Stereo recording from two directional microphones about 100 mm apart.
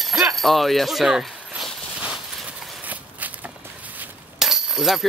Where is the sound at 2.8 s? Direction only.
15° right (ahead or behind).